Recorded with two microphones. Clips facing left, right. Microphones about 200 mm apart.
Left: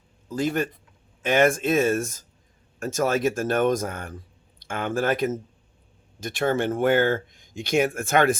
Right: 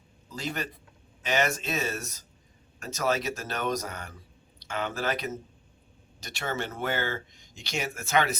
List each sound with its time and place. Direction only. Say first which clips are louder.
0.3 s speech: left 10 dB; 50° left (ahead or behind)